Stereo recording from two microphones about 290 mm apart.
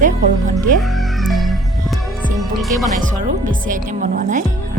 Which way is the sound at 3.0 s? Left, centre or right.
Right.